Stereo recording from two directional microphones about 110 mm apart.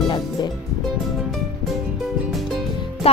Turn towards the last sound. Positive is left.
turn(degrees=65)  # may be behind; listen again after turning